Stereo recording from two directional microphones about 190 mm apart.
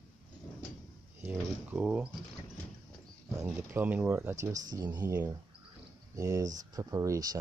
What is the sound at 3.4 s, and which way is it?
Speech, 10° right (ahead or behind).